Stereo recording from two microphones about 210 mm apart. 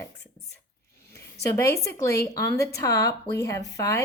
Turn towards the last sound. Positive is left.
turn(degrees=15)  # may be behind; listen again after turning